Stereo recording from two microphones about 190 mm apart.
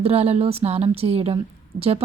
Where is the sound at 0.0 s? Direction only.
30° right (ahead or behind).